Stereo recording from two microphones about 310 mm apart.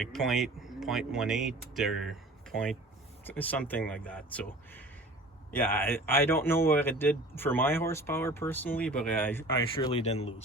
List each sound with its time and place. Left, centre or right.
0.0 s speech: centre
9.9 s speech: centre